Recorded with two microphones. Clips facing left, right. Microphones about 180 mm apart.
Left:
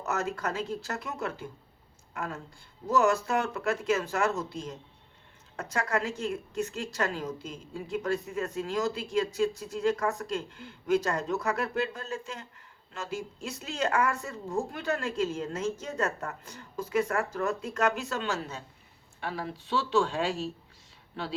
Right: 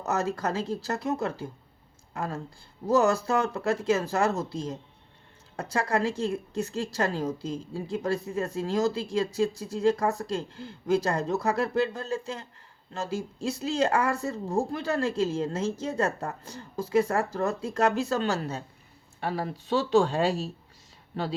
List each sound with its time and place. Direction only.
0.0 s a woman's voice: 35° right (ahead or behind)